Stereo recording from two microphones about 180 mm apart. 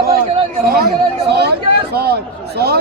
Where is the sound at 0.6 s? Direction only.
60° right (ahead or behind).